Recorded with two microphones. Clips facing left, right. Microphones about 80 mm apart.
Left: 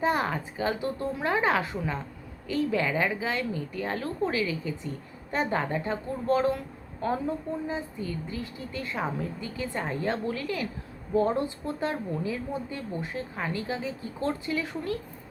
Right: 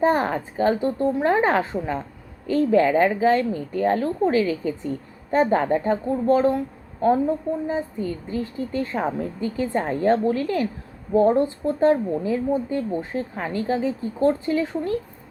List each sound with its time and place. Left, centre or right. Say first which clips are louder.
0.0 s a woman's voice: right 6 dB; right
7.7 s a woman's voice: right 7 dB; right